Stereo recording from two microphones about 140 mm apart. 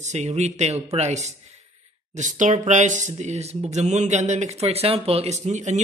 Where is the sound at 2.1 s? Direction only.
65° right (ahead or behind).